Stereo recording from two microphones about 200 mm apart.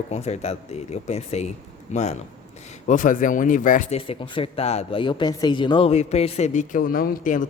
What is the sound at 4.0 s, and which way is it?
Speech, 25° left (ahead or behind).